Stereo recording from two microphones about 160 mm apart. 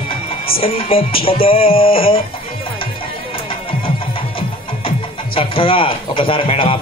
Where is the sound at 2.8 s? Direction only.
35° left (ahead or behind).